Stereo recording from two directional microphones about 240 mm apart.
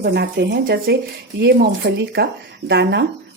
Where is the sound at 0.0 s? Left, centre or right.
Right.